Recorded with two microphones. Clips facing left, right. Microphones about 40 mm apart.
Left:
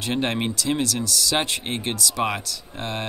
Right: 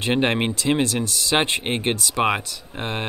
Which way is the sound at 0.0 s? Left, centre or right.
Right.